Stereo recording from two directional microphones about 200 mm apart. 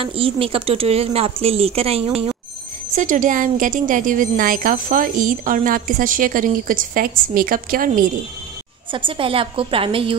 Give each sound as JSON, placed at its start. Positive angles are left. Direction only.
{"t": 0.0, "sound": "a woman's voice", "side_deg": -25}
{"t": 8.9, "sound": "a woman's voice", "side_deg": -25}